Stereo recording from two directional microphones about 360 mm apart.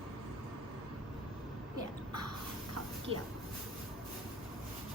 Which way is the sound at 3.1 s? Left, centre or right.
Right.